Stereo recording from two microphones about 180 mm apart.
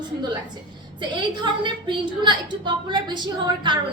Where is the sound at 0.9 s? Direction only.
25° right (ahead or behind).